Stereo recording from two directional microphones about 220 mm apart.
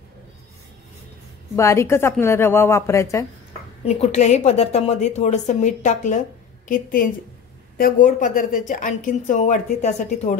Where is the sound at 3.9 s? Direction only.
30° left (ahead or behind).